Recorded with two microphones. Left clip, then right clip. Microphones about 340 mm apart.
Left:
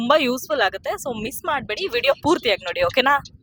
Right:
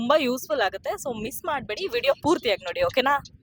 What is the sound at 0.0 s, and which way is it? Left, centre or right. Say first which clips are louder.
Speech: left 4 dB; right.